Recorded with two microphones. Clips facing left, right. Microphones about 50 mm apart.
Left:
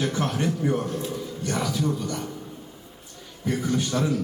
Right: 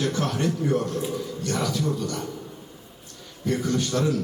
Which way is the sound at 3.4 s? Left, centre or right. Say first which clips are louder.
Right 1 dB; centre.